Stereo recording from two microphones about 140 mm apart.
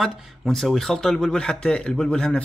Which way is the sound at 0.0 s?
Centre (ahead or behind).